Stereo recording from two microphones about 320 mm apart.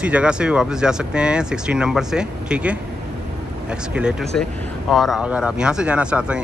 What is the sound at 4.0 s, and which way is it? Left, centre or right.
Speech, centre.